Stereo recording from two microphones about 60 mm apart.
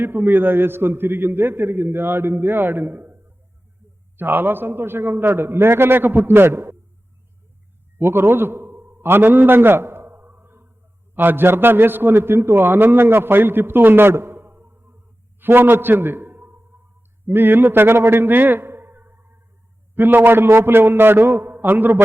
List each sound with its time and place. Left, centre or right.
0.0 s a man's voice: right
7.9 s a sound: right
11.1 s a man's voice: right